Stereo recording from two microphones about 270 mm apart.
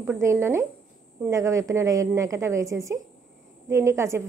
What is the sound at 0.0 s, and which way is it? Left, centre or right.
Speech, centre.